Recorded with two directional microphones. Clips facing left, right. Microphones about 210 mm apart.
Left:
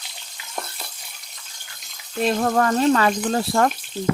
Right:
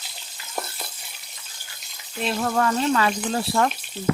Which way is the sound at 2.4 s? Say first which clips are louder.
Left 2 dB; 45° left (ahead or behind).